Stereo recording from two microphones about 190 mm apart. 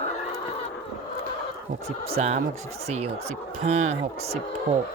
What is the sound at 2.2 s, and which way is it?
Speech, 35° right (ahead or behind).